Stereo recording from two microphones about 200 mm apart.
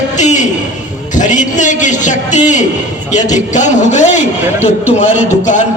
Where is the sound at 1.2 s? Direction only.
40° left (ahead or behind).